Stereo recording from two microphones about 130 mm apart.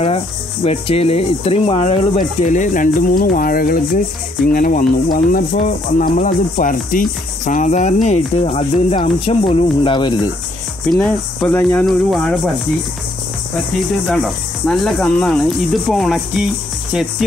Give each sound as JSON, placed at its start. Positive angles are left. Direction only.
{"t": 0.7, "sound": "speech", "side_deg": 50}
{"t": 2.1, "sound": "speech", "side_deg": 75}
{"t": 5.9, "sound": "speech", "side_deg": 75}
{"t": 10.9, "sound": "speech", "side_deg": 10}
{"t": 14.0, "sound": "speech", "side_deg": 0}